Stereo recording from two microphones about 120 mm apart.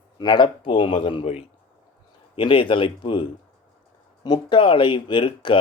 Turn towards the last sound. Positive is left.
turn(degrees=45)  # may be behind; listen again after turning